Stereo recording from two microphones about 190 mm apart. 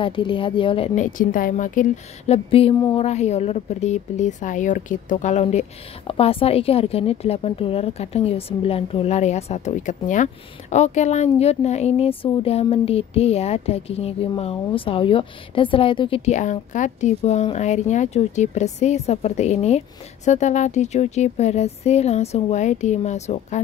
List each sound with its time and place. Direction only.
0.0 s speech: 25° left (ahead or behind)